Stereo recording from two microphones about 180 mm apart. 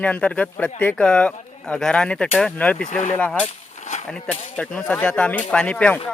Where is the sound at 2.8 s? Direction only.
45° left (ahead or behind).